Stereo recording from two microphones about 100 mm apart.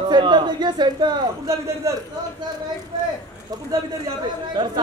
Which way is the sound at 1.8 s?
30° right (ahead or behind).